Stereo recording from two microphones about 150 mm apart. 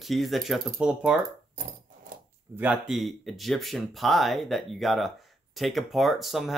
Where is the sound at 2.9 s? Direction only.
Centre (ahead or behind).